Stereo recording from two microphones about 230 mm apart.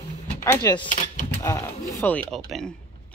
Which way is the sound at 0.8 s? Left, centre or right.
Left.